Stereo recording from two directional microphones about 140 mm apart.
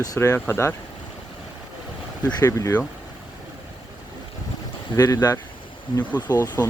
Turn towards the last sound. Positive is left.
turn(degrees=25)  # may be behind; listen again after turning